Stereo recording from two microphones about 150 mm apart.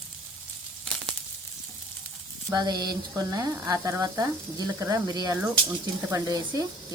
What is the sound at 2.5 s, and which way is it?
Sizzle, 25° right (ahead or behind).